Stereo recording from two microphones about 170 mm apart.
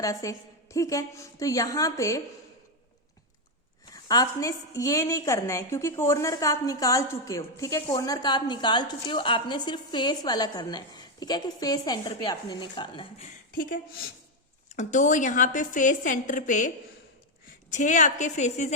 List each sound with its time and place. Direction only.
0.0 s a woman's voice: 20° left (ahead or behind)
3.9 s a woman's voice: 20° left (ahead or behind)
13.5 s a woman's voice: 55° left (ahead or behind)